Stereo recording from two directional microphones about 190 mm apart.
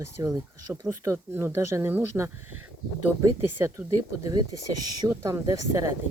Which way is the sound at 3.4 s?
15° right (ahead or behind).